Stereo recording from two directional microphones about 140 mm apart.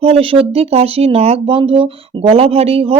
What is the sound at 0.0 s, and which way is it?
Speech, 40° right (ahead or behind).